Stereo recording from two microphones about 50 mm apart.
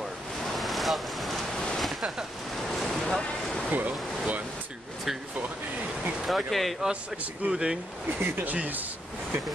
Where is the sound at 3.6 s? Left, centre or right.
Right.